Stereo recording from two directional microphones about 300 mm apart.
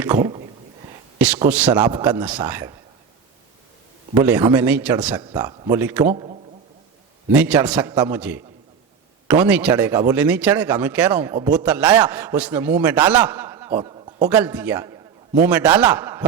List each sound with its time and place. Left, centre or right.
0.0 s a sound: centre
1.2 s a man's voice: centre
4.1 s a man's voice: centre
7.3 s speech: centre
14.3 s speech: centre